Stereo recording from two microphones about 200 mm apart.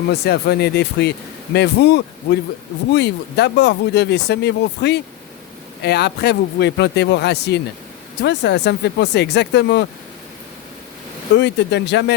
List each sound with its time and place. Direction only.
0.1 s speech: 55° left (ahead or behind)
11.3 s speech: 60° left (ahead or behind)